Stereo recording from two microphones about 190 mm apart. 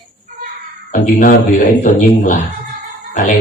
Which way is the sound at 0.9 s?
45° left (ahead or behind).